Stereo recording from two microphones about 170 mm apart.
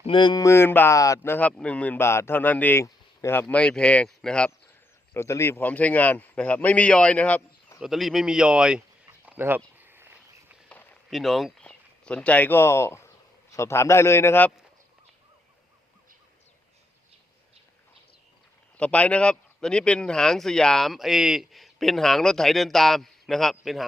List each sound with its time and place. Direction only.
0.0 s speech: 30° left (ahead or behind); by 4.5 s 5° left (ahead or behind)
5.1 s speech: 15° left (ahead or behind); by 8.8 s 5° right (ahead or behind)
9.2 s a sound: 10° right (ahead or behind)
10.7 s a sound: 10° left (ahead or behind)
11.1 s speech: centre (ahead or behind)
18.8 s speech: 10° left (ahead or behind)